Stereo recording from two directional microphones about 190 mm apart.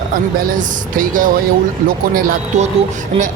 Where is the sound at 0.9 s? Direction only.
45° right (ahead or behind).